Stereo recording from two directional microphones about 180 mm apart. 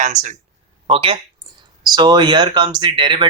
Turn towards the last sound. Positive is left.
turn(degrees=-25)  # may be behind; listen again after turning